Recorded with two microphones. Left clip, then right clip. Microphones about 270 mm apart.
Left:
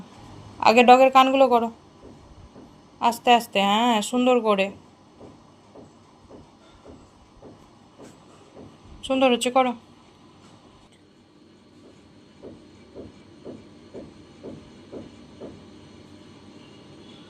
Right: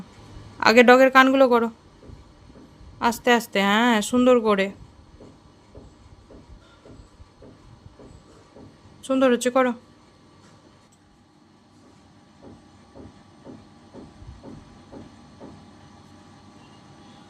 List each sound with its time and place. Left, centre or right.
0.6 s speech: right
3.0 s speech: right
9.0 s a woman's voice: right